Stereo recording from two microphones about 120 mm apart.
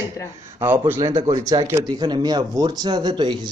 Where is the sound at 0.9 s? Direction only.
30° right (ahead or behind).